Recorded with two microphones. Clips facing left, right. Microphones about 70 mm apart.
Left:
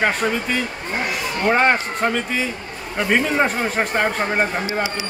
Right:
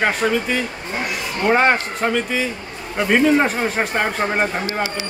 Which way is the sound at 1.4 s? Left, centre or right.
Centre.